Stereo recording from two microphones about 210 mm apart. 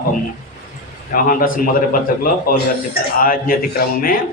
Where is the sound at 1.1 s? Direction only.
40° left (ahead or behind).